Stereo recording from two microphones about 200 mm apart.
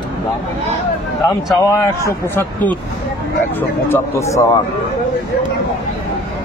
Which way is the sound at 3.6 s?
10° left (ahead or behind).